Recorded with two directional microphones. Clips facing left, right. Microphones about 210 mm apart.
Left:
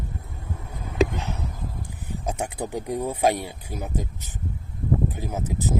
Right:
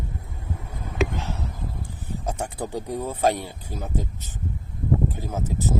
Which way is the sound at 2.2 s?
15° left (ahead or behind).